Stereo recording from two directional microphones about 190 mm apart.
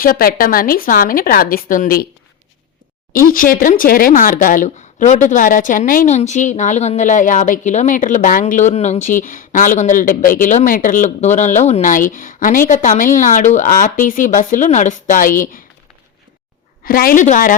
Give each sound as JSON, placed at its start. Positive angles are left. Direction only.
{"t": 0.0, "sound": "speech", "side_deg": 50}
{"t": 3.1, "sound": "speech", "side_deg": 50}
{"t": 16.8, "sound": "speech", "side_deg": 50}